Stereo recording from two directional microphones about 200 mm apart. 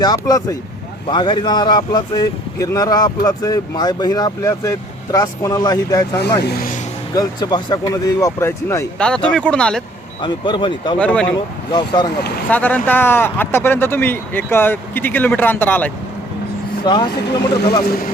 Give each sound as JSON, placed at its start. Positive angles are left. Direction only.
{"t": 0.0, "sound": "speech", "side_deg": 20}
{"t": 6.5, "sound": "speech", "side_deg": 45}
{"t": 7.1, "sound": "speech", "side_deg": 20}
{"t": 10.2, "sound": "speech", "side_deg": 25}
{"t": 10.9, "sound": "speech", "side_deg": 5}
{"t": 11.7, "sound": "speech", "side_deg": 20}
{"t": 12.5, "sound": "speech", "side_deg": 10}
{"t": 16.8, "sound": "speech", "side_deg": 20}